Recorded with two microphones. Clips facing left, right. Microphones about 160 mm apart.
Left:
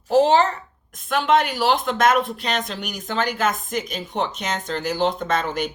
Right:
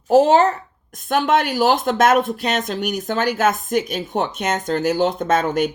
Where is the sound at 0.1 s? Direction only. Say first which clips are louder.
Right 3 dB; 45° right (ahead or behind).